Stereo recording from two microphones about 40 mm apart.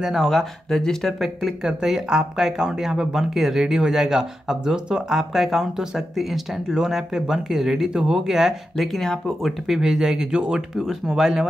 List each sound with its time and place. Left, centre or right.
0.0 s speech: centre
1.2 s speech: centre
8.7 s speech: centre
9.8 s speech: centre
11.1 s speech: centre